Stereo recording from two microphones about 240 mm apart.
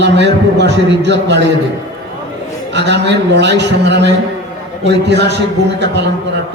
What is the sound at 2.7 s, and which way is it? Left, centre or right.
A man's voice, right.